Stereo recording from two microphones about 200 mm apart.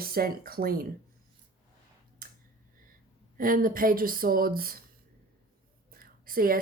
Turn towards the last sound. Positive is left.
turn(degrees=-45)  # may be behind; listen again after turning